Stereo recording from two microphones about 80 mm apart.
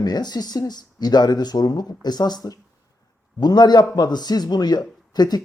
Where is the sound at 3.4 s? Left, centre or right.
Left.